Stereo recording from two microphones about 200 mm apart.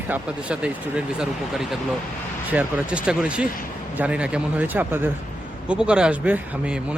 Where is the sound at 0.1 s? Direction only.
5° right (ahead or behind).